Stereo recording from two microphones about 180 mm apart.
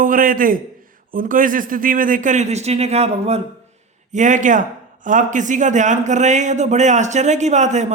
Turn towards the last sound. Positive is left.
turn(degrees=-40)  # may be behind; listen again after turning